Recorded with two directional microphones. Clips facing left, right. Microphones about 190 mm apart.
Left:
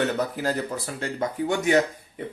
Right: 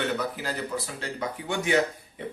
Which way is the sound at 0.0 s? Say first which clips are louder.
Left 4 dB; 45° left (ahead or behind).